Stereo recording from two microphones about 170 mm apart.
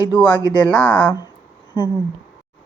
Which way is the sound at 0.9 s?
25° left (ahead or behind).